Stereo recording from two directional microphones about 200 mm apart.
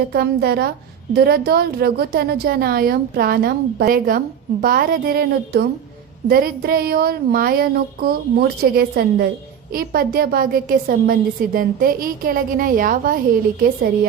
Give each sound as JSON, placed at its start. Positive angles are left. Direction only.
{"t": 0.1, "sound": "a woman's voice", "side_deg": -55}